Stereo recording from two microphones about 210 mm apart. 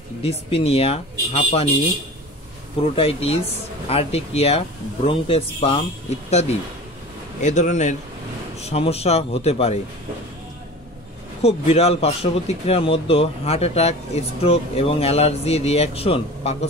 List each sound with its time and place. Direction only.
0.2 s speech: 30° left (ahead or behind)
3.0 s speech: 25° left (ahead or behind)
7.4 s speech: 35° left (ahead or behind)
11.4 s speech: 30° left (ahead or behind)